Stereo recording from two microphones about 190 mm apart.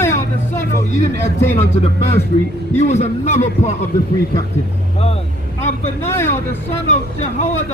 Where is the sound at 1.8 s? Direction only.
35° left (ahead or behind).